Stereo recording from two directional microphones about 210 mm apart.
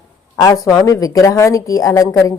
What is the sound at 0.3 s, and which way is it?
Speech, 15° left (ahead or behind).